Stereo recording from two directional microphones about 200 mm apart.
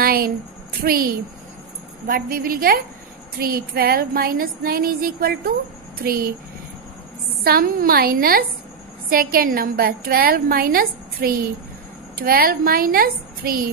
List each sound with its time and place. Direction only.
0.0 s a sound: 50° right (ahead or behind)
0.8 s a woman's voice: 50° right (ahead or behind)
7.4 s a woman's voice: 50° right (ahead or behind)